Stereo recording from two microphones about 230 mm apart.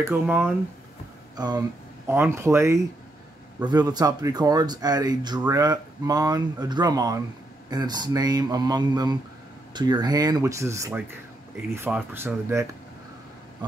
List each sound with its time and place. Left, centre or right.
1.3 s speech: centre